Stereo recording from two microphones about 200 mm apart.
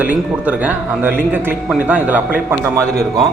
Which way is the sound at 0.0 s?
5° right (ahead or behind).